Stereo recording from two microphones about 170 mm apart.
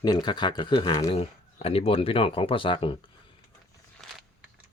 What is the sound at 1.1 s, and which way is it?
Speech, 35° left (ahead or behind).